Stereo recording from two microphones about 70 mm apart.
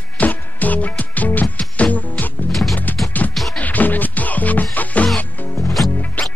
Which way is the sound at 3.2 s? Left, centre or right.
Left.